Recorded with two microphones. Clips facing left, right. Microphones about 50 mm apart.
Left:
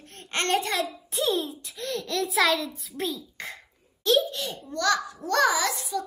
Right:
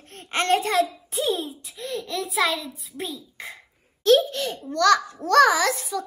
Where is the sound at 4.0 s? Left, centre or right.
Right.